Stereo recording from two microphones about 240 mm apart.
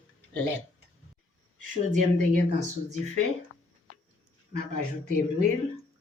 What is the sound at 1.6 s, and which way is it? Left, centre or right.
Speech, right.